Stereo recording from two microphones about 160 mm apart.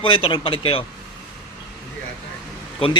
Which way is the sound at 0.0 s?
30° left (ahead or behind).